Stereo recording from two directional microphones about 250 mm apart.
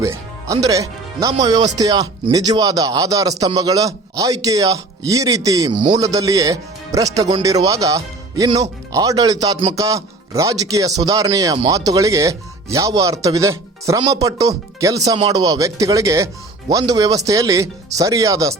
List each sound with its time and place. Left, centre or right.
0.0 s a man's voice: centre